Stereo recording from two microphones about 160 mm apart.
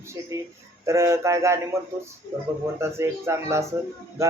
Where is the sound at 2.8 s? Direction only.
15° right (ahead or behind).